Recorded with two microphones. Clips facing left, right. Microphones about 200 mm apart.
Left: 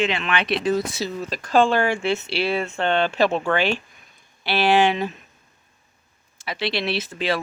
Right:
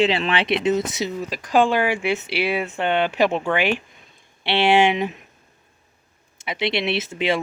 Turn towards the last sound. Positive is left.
turn(degrees=-20)  # may be behind; listen again after turning